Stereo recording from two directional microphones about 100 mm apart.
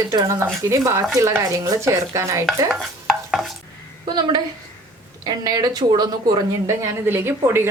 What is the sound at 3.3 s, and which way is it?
Stir, centre (ahead or behind).